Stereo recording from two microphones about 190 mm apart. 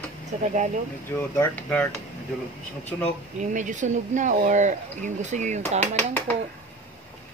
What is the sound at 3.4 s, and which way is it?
Speech, 40° right (ahead or behind).